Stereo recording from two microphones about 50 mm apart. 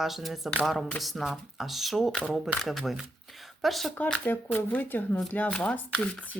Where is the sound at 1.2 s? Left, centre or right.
Centre.